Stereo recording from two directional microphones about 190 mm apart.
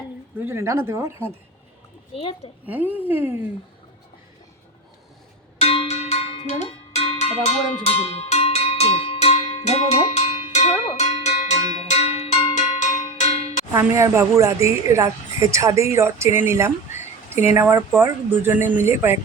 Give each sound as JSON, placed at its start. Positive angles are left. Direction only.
{"t": 0.3, "sound": "speech", "side_deg": -15}
{"t": 2.1, "sound": "a woman's voice", "side_deg": 30}
{"t": 2.6, "sound": "speech", "side_deg": -10}
{"t": 5.5, "sound": "cowbell", "side_deg": 30}
{"t": 13.7, "sound": "speech", "side_deg": -15}